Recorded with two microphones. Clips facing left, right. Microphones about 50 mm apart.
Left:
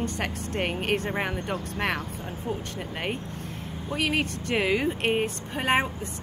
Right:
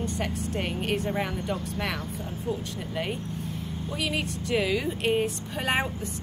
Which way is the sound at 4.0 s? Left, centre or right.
Left.